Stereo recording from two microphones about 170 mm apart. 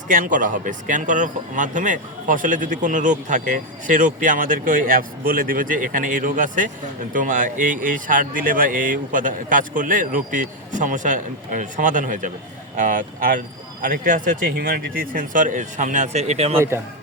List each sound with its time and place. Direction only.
0.1 s speech: 50° right (ahead or behind)
16.6 s a man's voice: 15° right (ahead or behind)